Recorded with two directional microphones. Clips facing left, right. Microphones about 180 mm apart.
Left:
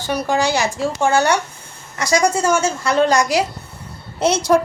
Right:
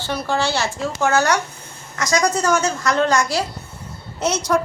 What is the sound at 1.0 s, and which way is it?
Speech, 30° left (ahead or behind).